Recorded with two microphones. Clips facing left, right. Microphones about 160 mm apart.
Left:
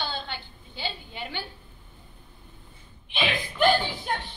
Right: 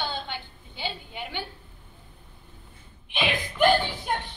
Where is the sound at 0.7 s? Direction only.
15° right (ahead or behind).